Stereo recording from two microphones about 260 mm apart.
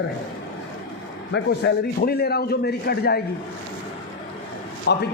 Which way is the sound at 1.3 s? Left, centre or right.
Left.